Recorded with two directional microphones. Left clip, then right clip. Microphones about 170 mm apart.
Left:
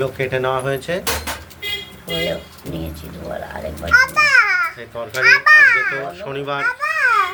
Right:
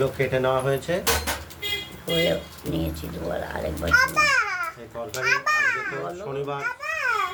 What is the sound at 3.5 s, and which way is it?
Speech, 60° right (ahead or behind).